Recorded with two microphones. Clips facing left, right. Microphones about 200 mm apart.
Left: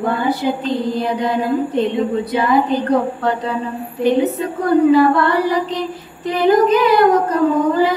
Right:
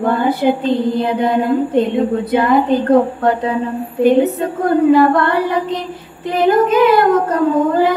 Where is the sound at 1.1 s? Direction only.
55° right (ahead or behind).